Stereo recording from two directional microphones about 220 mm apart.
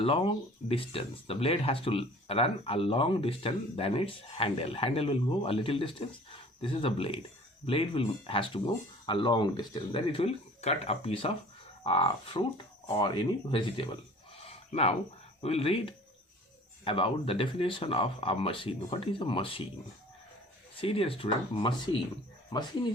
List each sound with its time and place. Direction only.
0.0 s speech: 25° left (ahead or behind)
14.3 s a sound: 25° left (ahead or behind)
15.4 s speech: 25° left (ahead or behind)
20.7 s speech: 25° left (ahead or behind)